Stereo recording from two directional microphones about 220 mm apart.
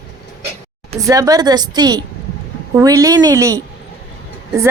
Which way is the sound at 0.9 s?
15° right (ahead or behind).